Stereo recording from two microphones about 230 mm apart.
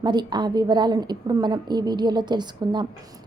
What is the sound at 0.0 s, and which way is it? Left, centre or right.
A woman's voice, centre.